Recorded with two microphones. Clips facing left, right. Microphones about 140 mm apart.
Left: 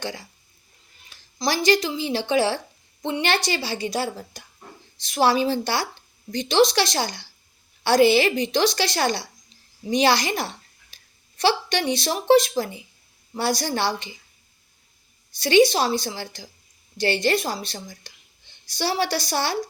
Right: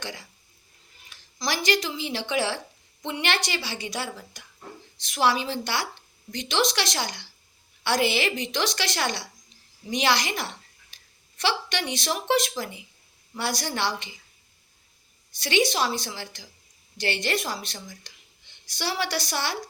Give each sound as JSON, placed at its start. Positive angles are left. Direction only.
{"t": 0.0, "sound": "a woman's voice", "side_deg": 30}
{"t": 1.4, "sound": "a woman's voice", "side_deg": 30}
{"t": 15.4, "sound": "a woman's voice", "side_deg": 35}